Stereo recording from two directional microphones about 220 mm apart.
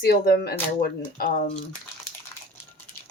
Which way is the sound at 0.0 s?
45° left (ahead or behind).